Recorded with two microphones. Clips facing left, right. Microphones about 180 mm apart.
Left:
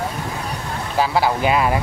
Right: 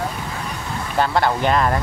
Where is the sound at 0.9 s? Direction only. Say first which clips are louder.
Even; 5° left (ahead or behind).